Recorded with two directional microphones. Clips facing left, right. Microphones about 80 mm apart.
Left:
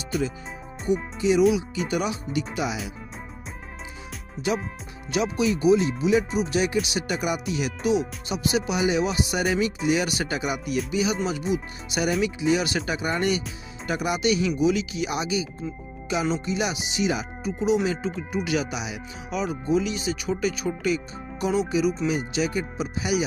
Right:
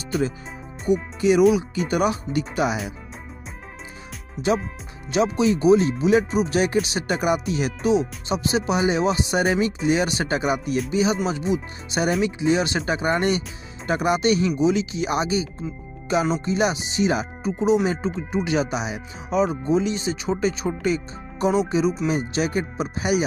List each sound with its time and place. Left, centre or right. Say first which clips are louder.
0.1 s speech: right 3 dB; centre
1.2 s speech: right 3 dB; right
5.1 s speech: right 4 dB; right